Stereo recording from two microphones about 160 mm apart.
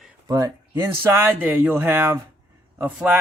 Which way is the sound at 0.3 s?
20° right (ahead or behind).